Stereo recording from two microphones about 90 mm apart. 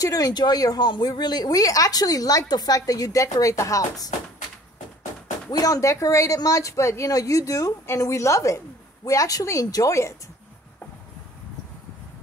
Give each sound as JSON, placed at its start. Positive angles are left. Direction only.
{"t": 0.0, "sound": "speech", "side_deg": 40}
{"t": 5.5, "sound": "speech", "side_deg": 45}